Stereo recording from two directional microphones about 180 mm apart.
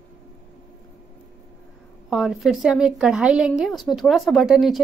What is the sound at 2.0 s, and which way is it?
A woman's voice, centre (ahead or behind).